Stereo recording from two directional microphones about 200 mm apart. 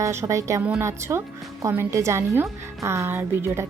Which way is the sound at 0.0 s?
15° right (ahead or behind).